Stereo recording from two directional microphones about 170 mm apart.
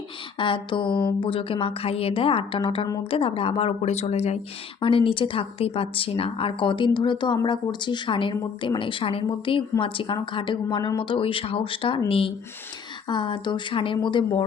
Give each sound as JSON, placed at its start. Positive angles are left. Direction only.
{"t": 0.3, "sound": "a woman's voice", "side_deg": 30}